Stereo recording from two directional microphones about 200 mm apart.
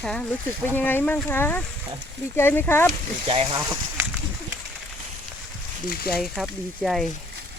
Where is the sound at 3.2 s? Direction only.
30° right (ahead or behind).